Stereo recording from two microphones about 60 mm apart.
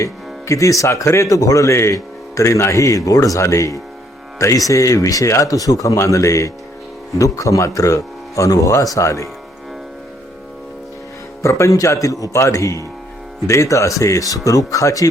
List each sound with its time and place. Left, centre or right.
0.0 s speech: left
6.0 s speech: left
11.4 s speech: left